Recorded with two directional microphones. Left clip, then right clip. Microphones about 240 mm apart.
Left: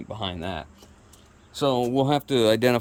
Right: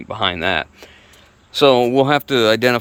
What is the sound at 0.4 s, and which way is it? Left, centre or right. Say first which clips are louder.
Speech: right 14 dB; right.